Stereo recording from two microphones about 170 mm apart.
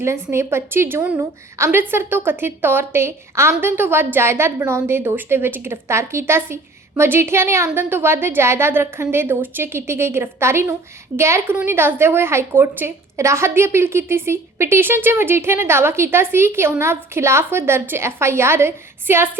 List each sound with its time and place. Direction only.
0.0 s a woman's voice: 15° right (ahead or behind)